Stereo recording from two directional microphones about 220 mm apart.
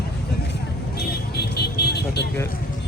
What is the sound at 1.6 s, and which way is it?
Vehicle, 50° left (ahead or behind).